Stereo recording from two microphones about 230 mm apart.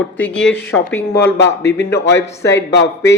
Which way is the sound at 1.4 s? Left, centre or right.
Left.